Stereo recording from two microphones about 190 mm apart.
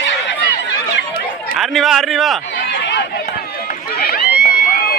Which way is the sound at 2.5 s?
70° left (ahead or behind).